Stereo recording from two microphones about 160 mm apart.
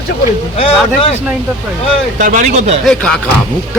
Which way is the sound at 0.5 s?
40° left (ahead or behind).